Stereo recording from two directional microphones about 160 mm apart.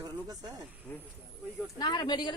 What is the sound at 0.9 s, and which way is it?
Speech, 10° left (ahead or behind).